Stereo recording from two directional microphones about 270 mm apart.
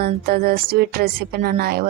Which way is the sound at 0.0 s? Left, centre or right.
Right.